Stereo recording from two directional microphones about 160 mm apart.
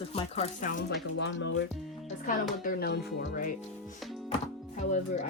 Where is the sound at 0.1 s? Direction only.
40° left (ahead or behind).